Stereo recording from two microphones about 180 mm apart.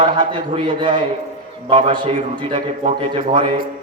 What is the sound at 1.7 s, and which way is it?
A man's voice, 30° right (ahead or behind).